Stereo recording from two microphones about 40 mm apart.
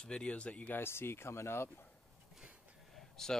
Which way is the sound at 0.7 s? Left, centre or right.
Left.